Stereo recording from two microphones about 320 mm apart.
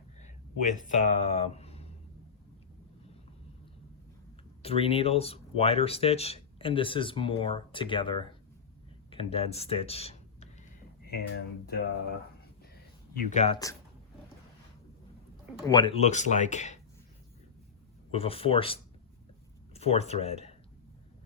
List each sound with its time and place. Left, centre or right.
0.8 s speech: left
4.6 s speech: centre
11.1 s speech: left
13.1 s speech: left
15.6 s speech: centre
18.1 s speech: centre